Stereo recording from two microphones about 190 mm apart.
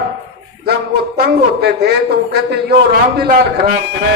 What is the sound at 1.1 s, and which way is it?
A man's voice, 55° right (ahead or behind).